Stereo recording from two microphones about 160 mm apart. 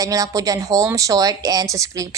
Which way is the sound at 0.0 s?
20° right (ahead or behind).